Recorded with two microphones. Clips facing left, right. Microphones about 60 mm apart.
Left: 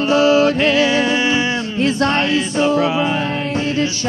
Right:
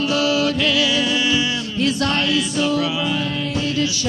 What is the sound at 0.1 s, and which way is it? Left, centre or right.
Music, left.